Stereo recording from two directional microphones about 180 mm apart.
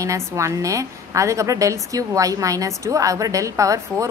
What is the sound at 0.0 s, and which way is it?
A woman's voice, 15° right (ahead or behind).